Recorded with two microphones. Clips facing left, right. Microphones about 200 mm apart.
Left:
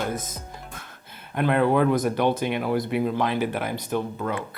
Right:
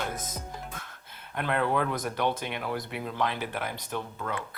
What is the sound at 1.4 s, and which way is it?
Speech, 10° left (ahead or behind).